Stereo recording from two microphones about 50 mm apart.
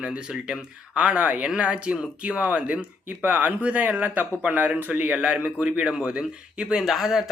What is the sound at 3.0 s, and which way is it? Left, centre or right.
Speech, right.